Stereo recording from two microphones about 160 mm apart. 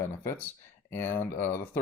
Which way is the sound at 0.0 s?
15° left (ahead or behind).